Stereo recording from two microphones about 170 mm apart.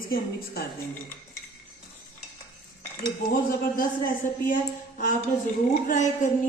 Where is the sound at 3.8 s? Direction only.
55° left (ahead or behind).